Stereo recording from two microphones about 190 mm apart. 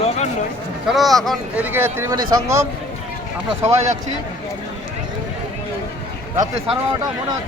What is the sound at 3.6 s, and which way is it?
Speech, 35° right (ahead or behind).